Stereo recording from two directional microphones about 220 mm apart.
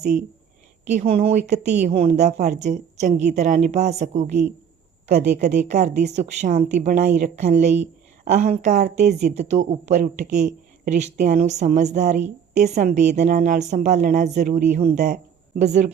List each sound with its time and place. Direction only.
0.9 s a woman's voice: 25° right (ahead or behind)
5.1 s a woman's voice: 45° right (ahead or behind)
5.7 s a woman's voice: 35° right (ahead or behind)